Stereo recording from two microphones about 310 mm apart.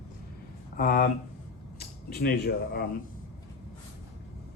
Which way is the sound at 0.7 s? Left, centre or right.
Left.